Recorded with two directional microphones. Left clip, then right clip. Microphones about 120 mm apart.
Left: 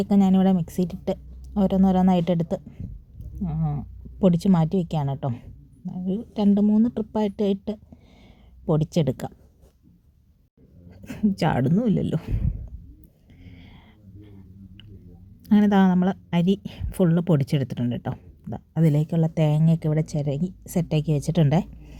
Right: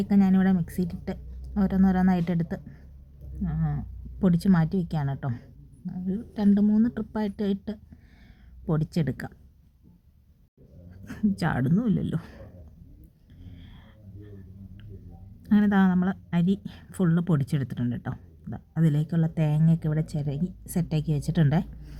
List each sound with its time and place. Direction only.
0.0 s a woman's voice: 35° left (ahead or behind)
11.0 s a woman's voice: 25° left (ahead or behind)
13.4 s whispering: 30° left (ahead or behind)
15.4 s a woman's voice: 35° left (ahead or behind)